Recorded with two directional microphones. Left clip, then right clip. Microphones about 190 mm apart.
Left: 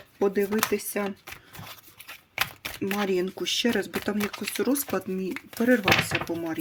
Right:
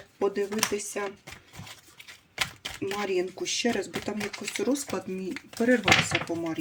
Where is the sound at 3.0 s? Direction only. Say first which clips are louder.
Left 2 dB; 40° left (ahead or behind).